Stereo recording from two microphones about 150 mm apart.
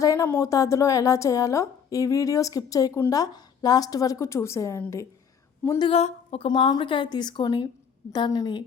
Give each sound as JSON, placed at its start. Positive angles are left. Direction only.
{"t": 0.0, "sound": "a woman's voice", "side_deg": 20}
{"t": 5.9, "sound": "a woman's voice", "side_deg": 45}